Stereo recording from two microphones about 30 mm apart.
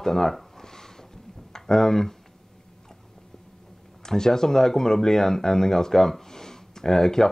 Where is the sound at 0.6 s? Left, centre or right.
Centre.